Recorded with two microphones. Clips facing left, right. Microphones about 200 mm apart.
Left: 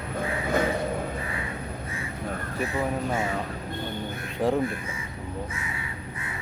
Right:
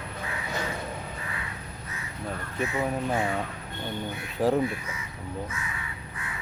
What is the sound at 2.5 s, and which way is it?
Speech, 35° left (ahead or behind).